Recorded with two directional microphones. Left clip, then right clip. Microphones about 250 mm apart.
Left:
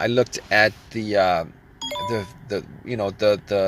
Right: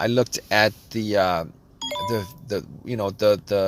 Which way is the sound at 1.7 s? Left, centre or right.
Centre.